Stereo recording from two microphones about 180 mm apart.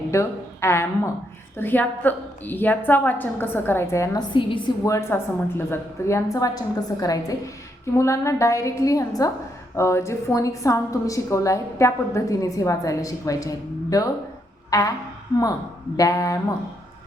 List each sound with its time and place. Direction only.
0.1 s a woman's voice: 15° left (ahead or behind)
4.9 s a woman's voice: 15° left (ahead or behind)
14.7 s a sound: 20° left (ahead or behind)
16.0 s a woman's voice: 20° left (ahead or behind)